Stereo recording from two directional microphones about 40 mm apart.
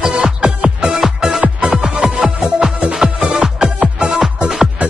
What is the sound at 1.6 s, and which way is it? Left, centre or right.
Music, right.